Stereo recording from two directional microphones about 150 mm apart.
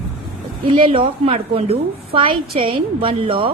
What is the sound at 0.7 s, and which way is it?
A woman's voice, 40° right (ahead or behind).